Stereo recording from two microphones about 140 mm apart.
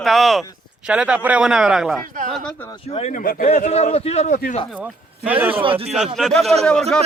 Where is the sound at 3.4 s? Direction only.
50° left (ahead or behind).